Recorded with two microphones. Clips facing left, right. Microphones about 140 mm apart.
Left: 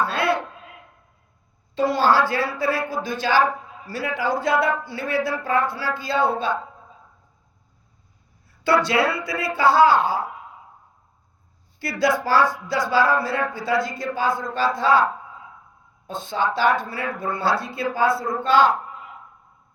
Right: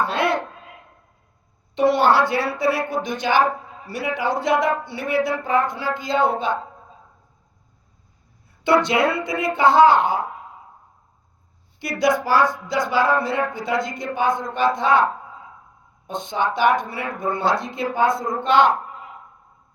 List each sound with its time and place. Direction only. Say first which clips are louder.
0.0 s a sound: right 1 dB; 20° right (ahead or behind)
1.7 s a woman's voice: right 2 dB; 25° right (ahead or behind)
8.6 s speech: right 2 dB; 20° right (ahead or behind)
11.8 s a woman's voice: right 2 dB; 20° right (ahead or behind)
16.0 s speech: right 1 dB; 20° right (ahead or behind)